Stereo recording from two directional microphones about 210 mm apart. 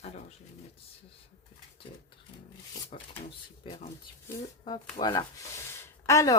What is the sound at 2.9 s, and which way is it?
Drawer open or close, 30° left (ahead or behind).